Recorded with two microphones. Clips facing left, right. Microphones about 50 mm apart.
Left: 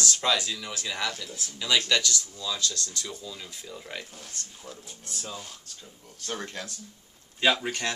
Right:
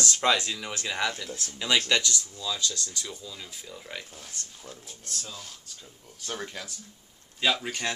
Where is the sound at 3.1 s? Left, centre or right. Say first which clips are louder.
Left 1 dB; centre.